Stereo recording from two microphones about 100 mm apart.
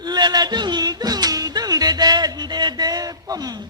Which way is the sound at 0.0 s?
45° right (ahead or behind).